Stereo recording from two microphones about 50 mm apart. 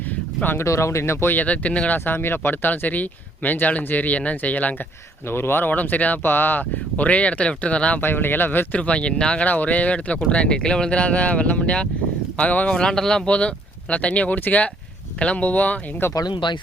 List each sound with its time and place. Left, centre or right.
0.6 s speech: left
1.3 s speech: left
2.0 s speech: left
5.3 s speech: left
8.0 s speech: left
8.8 s speech: left
12.6 s speech: centre; by 15.8 s left
16.0 s speech: left